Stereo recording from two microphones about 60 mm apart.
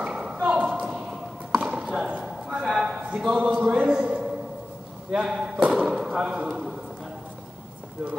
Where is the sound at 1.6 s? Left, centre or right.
Centre.